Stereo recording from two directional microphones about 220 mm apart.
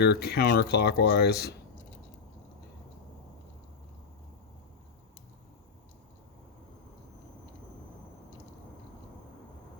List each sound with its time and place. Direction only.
0.0 s speech: 50° left (ahead or behind)